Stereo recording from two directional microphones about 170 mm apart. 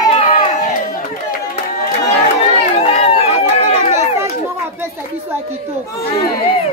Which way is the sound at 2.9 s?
35° left (ahead or behind).